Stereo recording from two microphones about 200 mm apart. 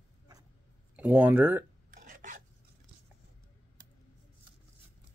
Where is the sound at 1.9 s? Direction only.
40° right (ahead or behind).